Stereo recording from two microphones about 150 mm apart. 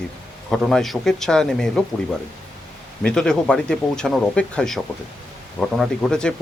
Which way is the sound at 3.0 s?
5° left (ahead or behind).